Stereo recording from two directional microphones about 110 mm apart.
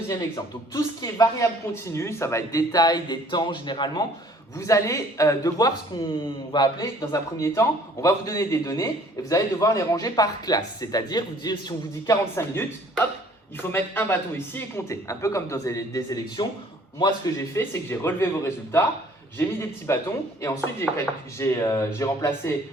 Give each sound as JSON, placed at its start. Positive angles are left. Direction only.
{"t": 0.7, "sound": "a man's voice", "side_deg": 30}
{"t": 4.5, "sound": "a man's voice", "side_deg": 30}
{"t": 12.0, "sound": "a man's voice", "side_deg": 20}
{"t": 17.5, "sound": "a man's voice", "side_deg": 20}